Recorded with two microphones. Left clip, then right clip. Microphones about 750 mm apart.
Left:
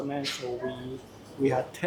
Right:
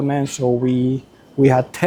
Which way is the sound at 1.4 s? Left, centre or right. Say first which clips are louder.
Right 11 dB; right.